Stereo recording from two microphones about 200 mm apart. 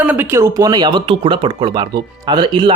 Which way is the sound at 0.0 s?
10° right (ahead or behind).